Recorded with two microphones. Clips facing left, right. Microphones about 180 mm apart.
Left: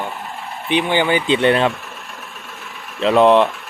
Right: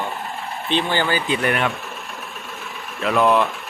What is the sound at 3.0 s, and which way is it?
Speech, 25° left (ahead or behind).